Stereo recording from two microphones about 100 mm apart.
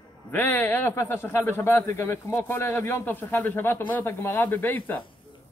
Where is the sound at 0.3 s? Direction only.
20° left (ahead or behind).